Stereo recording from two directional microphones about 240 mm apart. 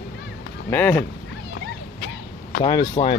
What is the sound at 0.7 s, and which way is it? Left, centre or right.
Speech, centre.